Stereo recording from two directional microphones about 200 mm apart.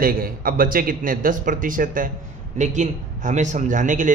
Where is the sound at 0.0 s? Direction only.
45° right (ahead or behind).